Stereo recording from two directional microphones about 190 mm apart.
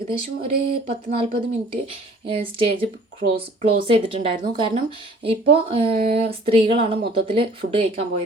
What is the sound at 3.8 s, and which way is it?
Speech, 25° right (ahead or behind).